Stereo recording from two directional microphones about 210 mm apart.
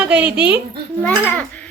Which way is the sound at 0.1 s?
5° right (ahead or behind).